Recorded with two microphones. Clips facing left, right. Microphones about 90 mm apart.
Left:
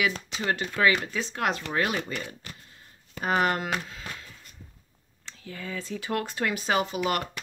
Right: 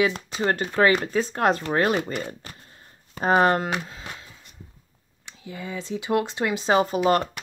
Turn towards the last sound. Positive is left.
turn(degrees=-30)  # may be behind; listen again after turning